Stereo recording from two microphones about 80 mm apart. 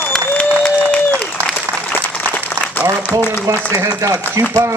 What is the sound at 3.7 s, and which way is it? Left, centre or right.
Speech, right.